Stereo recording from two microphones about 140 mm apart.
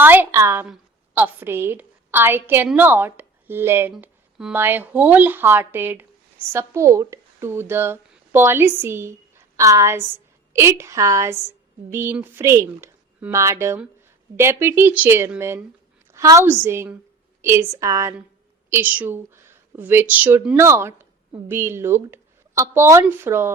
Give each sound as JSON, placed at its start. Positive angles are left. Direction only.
{"t": 0.0, "sound": "a woman's voice", "side_deg": -15}
{"t": 4.0, "sound": "a sound", "side_deg": -5}
{"t": 4.5, "sound": "a woman's voice", "side_deg": -15}